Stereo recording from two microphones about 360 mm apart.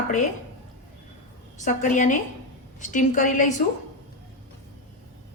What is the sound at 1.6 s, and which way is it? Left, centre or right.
A woman's voice, left.